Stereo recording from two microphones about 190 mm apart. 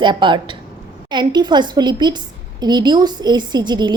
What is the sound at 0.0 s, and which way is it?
A woman's voice, 25° right (ahead or behind).